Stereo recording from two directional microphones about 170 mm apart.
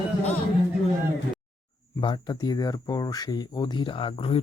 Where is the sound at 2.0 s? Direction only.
25° left (ahead or behind).